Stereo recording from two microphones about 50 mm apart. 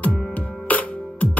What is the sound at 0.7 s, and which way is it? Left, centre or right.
Music, left.